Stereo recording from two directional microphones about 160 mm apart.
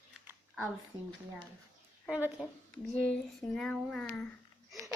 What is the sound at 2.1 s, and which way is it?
Speech, 10° right (ahead or behind).